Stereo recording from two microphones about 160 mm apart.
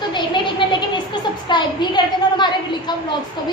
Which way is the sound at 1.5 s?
30° left (ahead or behind).